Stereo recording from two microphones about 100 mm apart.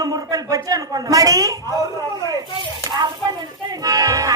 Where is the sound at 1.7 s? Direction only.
40° left (ahead or behind).